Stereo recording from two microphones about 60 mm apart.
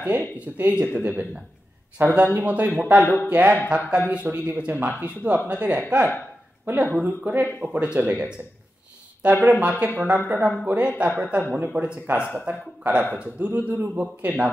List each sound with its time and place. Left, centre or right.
0.0 s speech: right